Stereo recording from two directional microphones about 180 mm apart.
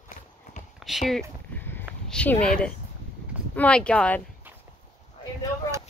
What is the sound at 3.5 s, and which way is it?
Speech, 5° left (ahead or behind).